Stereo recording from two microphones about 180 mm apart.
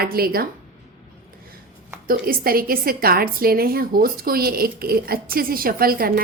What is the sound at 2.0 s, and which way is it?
A woman's voice, 55° right (ahead or behind).